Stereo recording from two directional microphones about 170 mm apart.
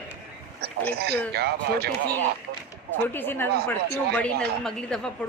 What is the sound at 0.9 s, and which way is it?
Speech, 70° right (ahead or behind).